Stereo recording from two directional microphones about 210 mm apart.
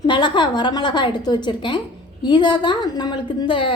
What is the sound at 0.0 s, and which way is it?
A woman's voice, 20° left (ahead or behind).